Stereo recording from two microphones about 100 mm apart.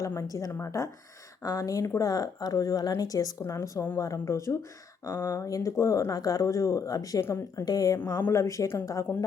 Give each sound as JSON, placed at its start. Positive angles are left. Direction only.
{"t": 0.0, "sound": "speech", "side_deg": 30}